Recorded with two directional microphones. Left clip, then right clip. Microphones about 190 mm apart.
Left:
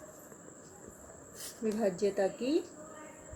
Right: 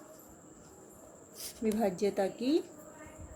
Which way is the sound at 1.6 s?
45° right (ahead or behind).